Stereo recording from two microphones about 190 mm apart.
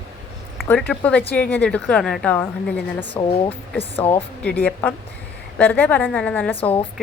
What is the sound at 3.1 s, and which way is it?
Speech, 25° left (ahead or behind).